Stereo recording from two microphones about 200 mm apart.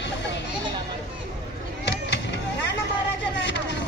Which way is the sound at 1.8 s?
60° left (ahead or behind).